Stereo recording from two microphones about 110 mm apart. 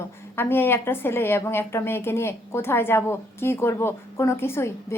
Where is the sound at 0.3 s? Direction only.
20° left (ahead or behind).